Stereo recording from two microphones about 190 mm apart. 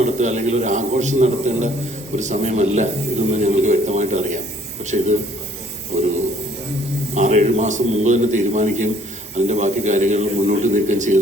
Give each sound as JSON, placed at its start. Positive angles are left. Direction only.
{"t": 0.0, "sound": "a man's voice", "side_deg": -35}
{"t": 7.1, "sound": "speech", "side_deg": -35}